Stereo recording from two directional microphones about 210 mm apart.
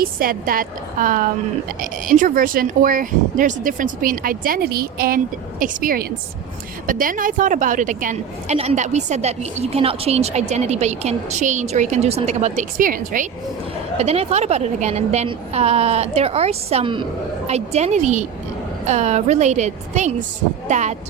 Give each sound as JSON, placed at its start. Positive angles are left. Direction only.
{"t": 0.0, "sound": "a woman's voice", "side_deg": -45}